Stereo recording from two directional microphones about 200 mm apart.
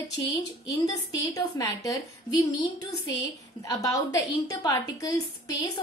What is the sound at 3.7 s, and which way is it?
A woman's voice, 15° left (ahead or behind).